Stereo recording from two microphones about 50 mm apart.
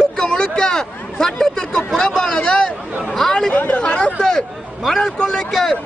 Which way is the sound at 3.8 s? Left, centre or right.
Centre.